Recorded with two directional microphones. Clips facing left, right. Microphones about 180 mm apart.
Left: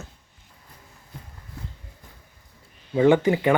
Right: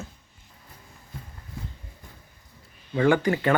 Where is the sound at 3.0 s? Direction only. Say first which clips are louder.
Left 3 dB; 20° left (ahead or behind).